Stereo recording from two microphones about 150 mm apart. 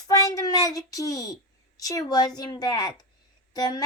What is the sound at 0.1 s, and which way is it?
A child's voice, 25° left (ahead or behind).